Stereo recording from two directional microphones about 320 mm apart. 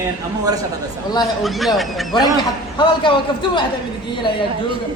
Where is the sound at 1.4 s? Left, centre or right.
Centre.